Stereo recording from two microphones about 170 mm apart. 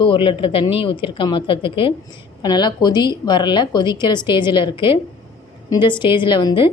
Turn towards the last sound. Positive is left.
turn(degrees=30)  # may be behind; listen again after turning